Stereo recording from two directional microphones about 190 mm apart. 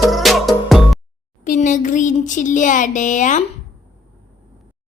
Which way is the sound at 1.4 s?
40° left (ahead or behind).